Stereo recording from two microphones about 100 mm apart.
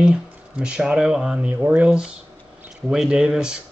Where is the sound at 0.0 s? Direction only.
10° right (ahead or behind).